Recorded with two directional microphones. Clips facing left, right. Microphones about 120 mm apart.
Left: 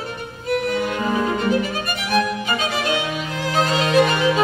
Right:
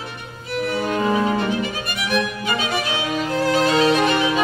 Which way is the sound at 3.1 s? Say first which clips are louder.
Right 3 dB; 35° right (ahead or behind).